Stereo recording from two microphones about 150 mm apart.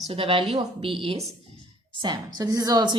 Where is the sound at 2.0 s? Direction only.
25° right (ahead or behind).